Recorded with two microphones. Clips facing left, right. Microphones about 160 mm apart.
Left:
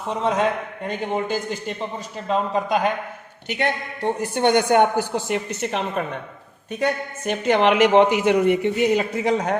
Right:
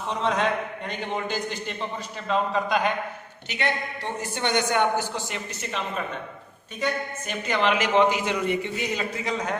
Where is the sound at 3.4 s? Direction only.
50° left (ahead or behind).